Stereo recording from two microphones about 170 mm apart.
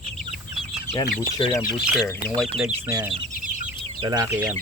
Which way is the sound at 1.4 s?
30° left (ahead or behind).